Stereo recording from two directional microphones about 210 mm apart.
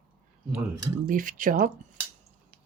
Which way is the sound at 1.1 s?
40° right (ahead or behind).